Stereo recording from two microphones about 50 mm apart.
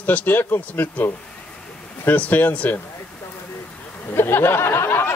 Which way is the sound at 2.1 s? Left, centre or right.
Left.